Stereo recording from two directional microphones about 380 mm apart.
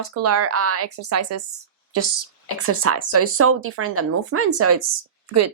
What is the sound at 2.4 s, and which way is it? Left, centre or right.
Speech, right.